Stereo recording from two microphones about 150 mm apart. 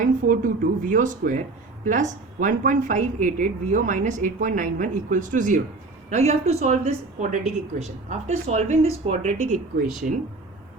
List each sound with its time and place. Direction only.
0.0 s speech: 65° right (ahead or behind)
6.1 s a woman's voice: 50° right (ahead or behind)